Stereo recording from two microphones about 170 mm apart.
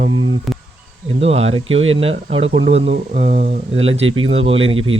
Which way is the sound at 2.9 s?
50° right (ahead or behind).